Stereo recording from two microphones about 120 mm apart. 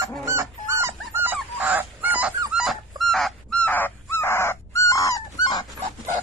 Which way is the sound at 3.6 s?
15° left (ahead or behind).